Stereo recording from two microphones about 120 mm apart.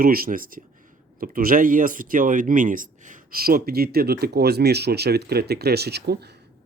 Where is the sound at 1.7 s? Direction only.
90° right.